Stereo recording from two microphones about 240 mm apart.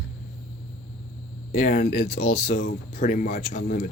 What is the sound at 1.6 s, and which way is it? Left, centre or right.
Speech, left.